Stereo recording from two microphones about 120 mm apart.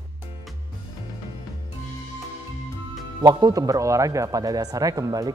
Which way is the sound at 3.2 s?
35° right (ahead or behind).